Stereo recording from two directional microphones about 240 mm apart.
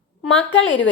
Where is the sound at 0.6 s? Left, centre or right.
Left.